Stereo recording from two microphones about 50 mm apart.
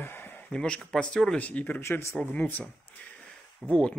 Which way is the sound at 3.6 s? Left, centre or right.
Centre.